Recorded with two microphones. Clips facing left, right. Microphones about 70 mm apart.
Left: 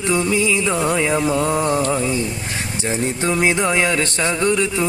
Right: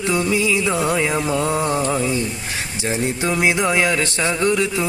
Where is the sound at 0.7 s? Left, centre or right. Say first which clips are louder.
Even; left.